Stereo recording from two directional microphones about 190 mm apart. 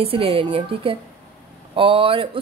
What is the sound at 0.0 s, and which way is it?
A woman's voice, 30° right (ahead or behind).